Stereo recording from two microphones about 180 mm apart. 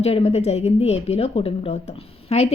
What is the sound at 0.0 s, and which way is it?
A woman's voice, 35° left (ahead or behind).